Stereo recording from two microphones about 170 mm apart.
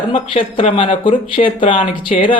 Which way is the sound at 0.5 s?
30° left (ahead or behind).